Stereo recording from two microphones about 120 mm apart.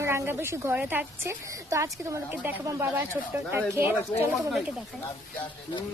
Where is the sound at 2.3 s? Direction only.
15° right (ahead or behind).